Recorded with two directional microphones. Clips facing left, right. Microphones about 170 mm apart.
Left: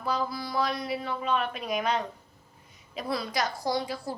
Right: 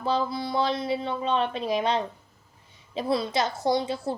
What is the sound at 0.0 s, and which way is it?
A woman's voice, 25° right (ahead or behind).